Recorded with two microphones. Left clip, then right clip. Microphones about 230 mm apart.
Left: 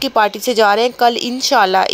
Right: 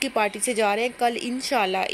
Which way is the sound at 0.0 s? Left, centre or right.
Centre.